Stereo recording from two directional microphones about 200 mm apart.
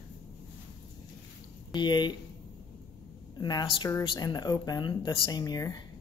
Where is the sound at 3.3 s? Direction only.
20° left (ahead or behind).